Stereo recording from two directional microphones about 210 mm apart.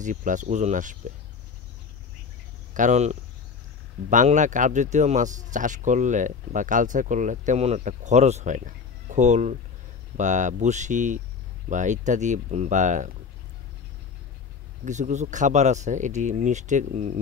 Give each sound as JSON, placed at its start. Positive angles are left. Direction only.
{"t": 0.0, "sound": "speech", "side_deg": -35}
{"t": 2.7, "sound": "speech", "side_deg": -35}
{"t": 14.9, "sound": "speech", "side_deg": -35}